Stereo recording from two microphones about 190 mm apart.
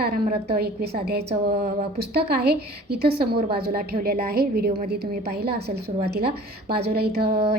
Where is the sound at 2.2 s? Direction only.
55° right (ahead or behind).